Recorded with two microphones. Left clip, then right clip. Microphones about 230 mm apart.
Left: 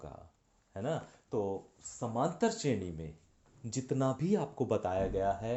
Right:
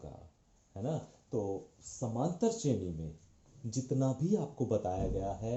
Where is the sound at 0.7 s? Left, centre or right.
Left.